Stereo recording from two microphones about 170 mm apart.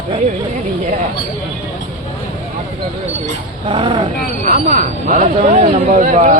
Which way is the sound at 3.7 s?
30° right (ahead or behind).